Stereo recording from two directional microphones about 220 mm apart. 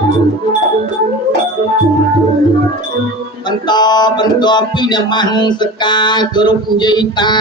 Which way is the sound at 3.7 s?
20° left (ahead or behind).